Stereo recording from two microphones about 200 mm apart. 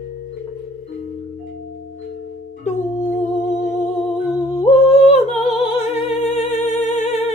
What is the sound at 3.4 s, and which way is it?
Humming, 35° left (ahead or behind).